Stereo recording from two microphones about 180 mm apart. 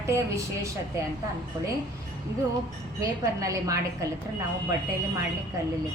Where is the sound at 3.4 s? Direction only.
20° right (ahead or behind).